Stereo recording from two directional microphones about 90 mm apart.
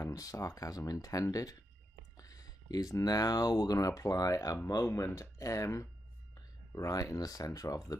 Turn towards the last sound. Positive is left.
turn(degrees=40)  # may be behind; listen again after turning